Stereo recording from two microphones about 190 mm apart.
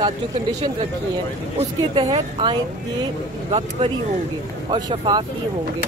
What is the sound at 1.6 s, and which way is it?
Speech, 25° right (ahead or behind).